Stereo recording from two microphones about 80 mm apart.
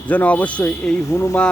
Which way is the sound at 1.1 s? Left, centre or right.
Left.